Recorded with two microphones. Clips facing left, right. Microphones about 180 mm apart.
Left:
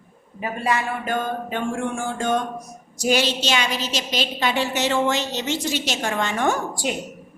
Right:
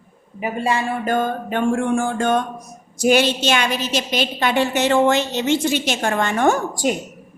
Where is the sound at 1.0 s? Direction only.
45° right (ahead or behind).